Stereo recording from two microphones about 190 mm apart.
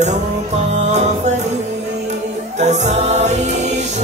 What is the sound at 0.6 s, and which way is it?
Music, 35° right (ahead or behind).